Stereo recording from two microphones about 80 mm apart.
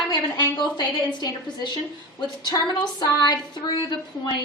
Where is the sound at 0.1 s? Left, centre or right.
Left.